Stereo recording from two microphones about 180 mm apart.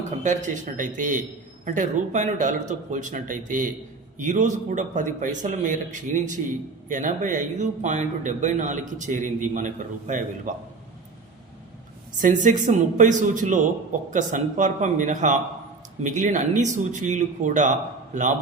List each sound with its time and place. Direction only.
0.2 s speech: 45° right (ahead or behind)
12.2 s speech: 45° right (ahead or behind)